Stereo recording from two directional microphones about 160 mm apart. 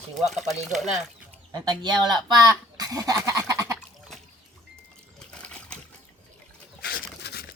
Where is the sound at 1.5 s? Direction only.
25° right (ahead or behind).